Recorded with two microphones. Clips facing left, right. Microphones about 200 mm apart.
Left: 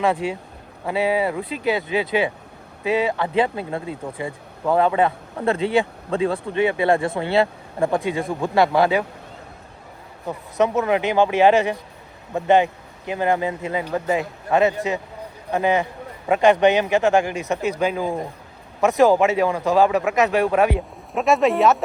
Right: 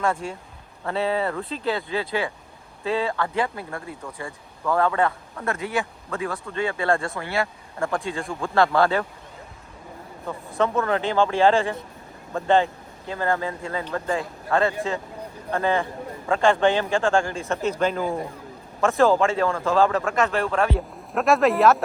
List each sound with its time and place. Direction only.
0.9 s speech: 15° left (ahead or behind)
5.4 s speech: 30° left (ahead or behind)
6.4 s speech: 15° left (ahead or behind)
10.2 s speech: 20° left (ahead or behind)
20.7 s speech: centre (ahead or behind)